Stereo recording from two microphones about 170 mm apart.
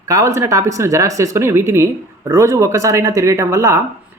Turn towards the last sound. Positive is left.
turn(degrees=-15)  # may be behind; listen again after turning